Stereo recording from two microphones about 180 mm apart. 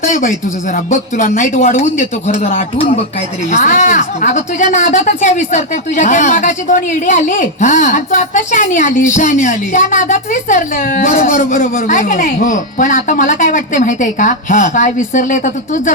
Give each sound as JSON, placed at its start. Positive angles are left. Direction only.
{"t": 0.0, "sound": "speech", "side_deg": 50}